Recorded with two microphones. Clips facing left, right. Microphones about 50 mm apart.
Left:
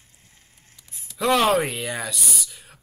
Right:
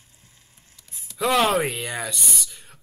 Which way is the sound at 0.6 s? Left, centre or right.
Left.